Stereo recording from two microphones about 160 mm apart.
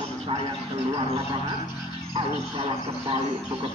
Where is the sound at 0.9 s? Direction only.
40° right (ahead or behind).